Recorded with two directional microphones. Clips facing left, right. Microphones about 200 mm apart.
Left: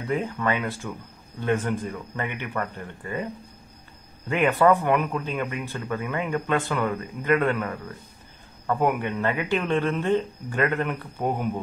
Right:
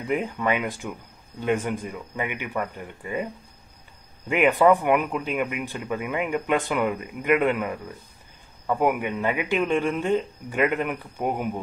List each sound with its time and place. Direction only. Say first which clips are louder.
0.0 s speech: right 1 dB; 15° right (ahead or behind)
4.3 s speech: right 1 dB; 15° right (ahead or behind)